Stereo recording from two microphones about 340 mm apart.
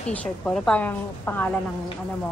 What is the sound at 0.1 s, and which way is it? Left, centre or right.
A woman's voice, centre.